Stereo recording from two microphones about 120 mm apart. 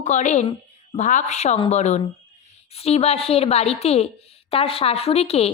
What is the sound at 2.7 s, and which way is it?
A woman's voice, 55° left (ahead or behind).